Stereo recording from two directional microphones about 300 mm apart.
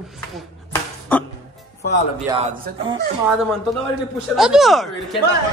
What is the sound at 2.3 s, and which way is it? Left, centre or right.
Speech, centre.